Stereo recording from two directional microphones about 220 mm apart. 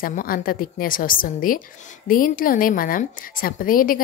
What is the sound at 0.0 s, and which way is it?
A woman's voice, 40° left (ahead or behind).